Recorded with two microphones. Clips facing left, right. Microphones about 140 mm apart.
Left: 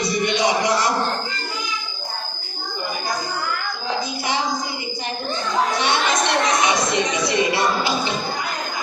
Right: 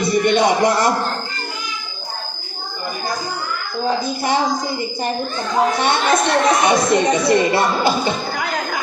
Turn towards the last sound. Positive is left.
turn(degrees=-50)  # may be behind; listen again after turning